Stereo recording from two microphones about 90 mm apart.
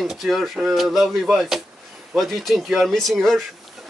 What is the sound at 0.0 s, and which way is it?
A man's voice, 5° right (ahead or behind).